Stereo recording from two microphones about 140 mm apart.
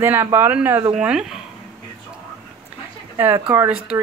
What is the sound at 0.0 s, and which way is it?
Speech, 15° right (ahead or behind).